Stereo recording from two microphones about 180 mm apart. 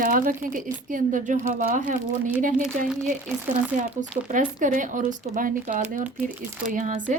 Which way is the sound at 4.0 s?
45° right (ahead or behind).